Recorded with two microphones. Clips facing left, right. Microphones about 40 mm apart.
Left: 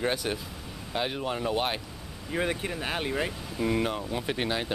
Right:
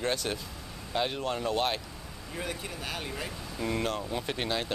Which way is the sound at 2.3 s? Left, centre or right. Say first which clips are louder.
Left 7 dB; left.